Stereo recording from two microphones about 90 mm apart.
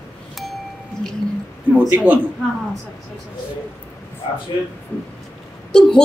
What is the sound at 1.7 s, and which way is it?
Speech, 15° right (ahead or behind).